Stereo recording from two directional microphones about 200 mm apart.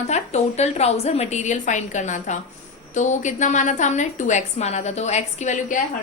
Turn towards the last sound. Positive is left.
turn(degrees=35)  # may be behind; listen again after turning